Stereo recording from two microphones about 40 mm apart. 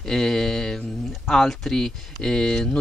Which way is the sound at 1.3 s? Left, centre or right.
Centre.